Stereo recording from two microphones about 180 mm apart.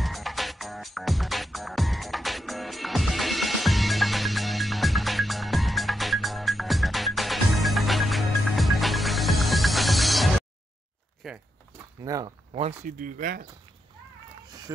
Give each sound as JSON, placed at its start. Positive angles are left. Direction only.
{"t": 0.0, "sound": "music", "side_deg": 0}
{"t": 11.2, "sound": "a sound", "side_deg": 0}
{"t": 12.0, "sound": "speech", "side_deg": -20}
{"t": 12.5, "sound": "speech", "side_deg": -40}